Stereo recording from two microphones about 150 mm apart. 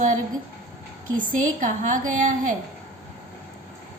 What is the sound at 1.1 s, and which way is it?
A woman's voice, 60° right (ahead or behind).